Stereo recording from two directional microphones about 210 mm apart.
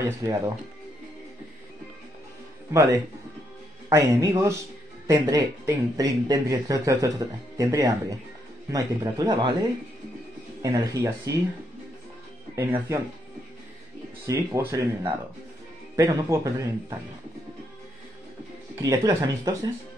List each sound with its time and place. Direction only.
0.0 s speech: 15° right (ahead or behind)
2.7 s speech: 15° right (ahead or behind)
10.6 s speech: 15° right (ahead or behind)
12.5 s speech: 10° right (ahead or behind)
14.2 s speech: 15° right (ahead or behind)
18.8 s speech: 15° right (ahead or behind)